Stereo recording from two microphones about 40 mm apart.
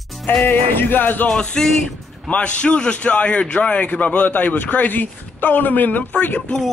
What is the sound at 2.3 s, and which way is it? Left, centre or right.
A man's voice, left.